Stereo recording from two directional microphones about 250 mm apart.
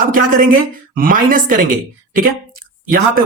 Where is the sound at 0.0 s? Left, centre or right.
Right.